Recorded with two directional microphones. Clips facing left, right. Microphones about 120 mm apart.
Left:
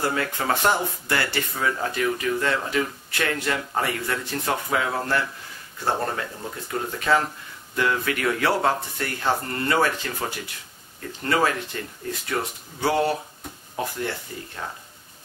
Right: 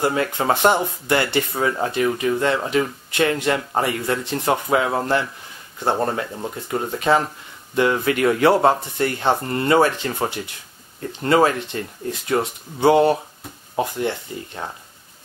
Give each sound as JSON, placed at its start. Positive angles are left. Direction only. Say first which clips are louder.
{"t": 0.0, "sound": "speech", "louder": "right 5 dB", "side_deg": -20}